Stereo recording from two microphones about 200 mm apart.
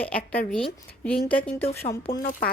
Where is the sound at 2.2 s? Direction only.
45° left (ahead or behind).